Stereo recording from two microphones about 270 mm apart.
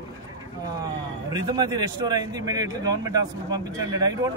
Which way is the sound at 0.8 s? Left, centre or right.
Centre.